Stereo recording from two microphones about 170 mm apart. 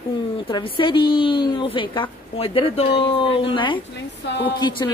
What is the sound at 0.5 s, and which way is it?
A woman's voice, 25° left (ahead or behind).